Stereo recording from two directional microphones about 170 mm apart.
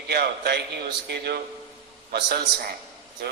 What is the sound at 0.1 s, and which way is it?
A man's voice, 70° right (ahead or behind).